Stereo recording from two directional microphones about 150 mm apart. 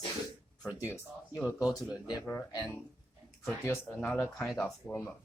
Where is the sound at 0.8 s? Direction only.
20° left (ahead or behind).